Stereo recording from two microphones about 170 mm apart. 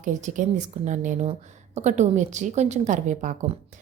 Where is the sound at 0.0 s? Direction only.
45° right (ahead or behind).